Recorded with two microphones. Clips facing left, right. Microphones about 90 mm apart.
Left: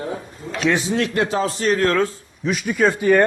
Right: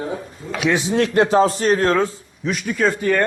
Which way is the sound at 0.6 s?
10° right (ahead or behind).